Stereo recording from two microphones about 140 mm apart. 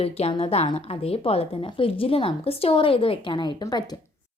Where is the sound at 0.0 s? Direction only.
45° left (ahead or behind).